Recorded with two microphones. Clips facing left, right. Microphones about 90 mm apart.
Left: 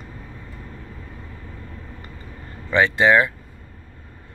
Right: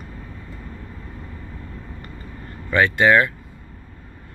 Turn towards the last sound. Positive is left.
turn(degrees=20)  # may be behind; listen again after turning